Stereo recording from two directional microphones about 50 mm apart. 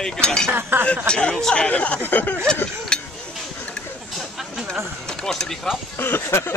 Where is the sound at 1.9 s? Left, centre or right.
Left.